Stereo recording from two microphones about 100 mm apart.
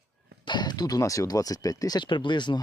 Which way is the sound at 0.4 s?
45° left (ahead or behind).